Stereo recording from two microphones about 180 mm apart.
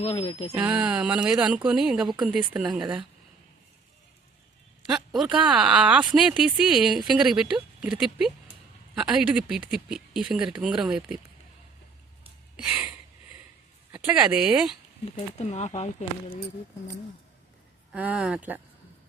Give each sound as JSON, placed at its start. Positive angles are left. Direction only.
{"t": 0.0, "sound": "speech", "side_deg": 35}
{"t": 0.5, "sound": "speech", "side_deg": -5}
{"t": 4.9, "sound": "a man's voice", "side_deg": -5}
{"t": 12.5, "sound": "speech", "side_deg": -5}
{"t": 13.9, "sound": "speech", "side_deg": -5}
{"t": 15.4, "sound": "speech", "side_deg": 40}
{"t": 17.9, "sound": "speech", "side_deg": -5}